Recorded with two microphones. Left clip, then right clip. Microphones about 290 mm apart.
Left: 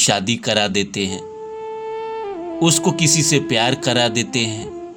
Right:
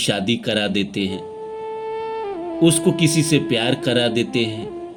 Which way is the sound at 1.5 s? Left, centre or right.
Centre.